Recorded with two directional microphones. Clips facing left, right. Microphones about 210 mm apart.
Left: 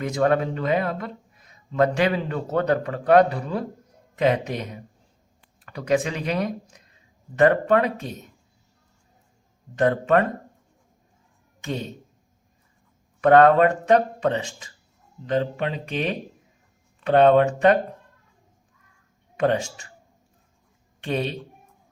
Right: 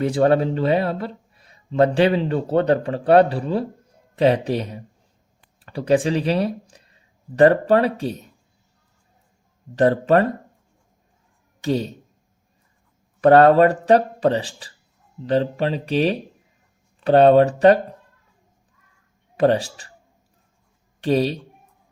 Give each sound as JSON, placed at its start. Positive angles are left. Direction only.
{"t": 0.0, "sound": "speech", "side_deg": -30}
{"t": 9.7, "sound": "speech", "side_deg": -35}
{"t": 11.6, "sound": "speech", "side_deg": -35}
{"t": 13.2, "sound": "speech", "side_deg": -35}
{"t": 19.4, "sound": "speech", "side_deg": -35}
{"t": 21.0, "sound": "speech", "side_deg": -35}